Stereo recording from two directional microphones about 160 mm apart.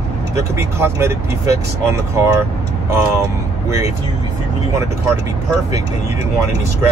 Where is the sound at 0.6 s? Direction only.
15° right (ahead or behind).